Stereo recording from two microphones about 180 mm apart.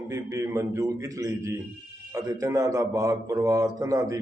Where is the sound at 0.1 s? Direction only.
15° right (ahead or behind).